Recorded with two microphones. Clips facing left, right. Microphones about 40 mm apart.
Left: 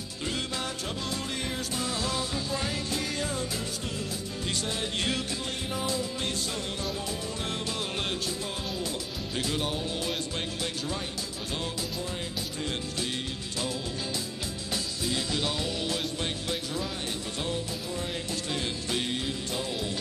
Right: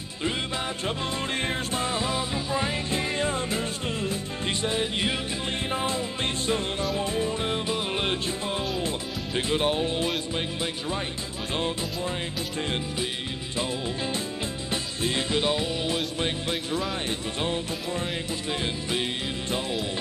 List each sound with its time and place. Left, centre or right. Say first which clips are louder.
0.8 s music: right 5 dB; right
5.7 s music: right 2 dB; right
13.6 s music: right 4 dB; right
18.5 s music: right 3 dB; right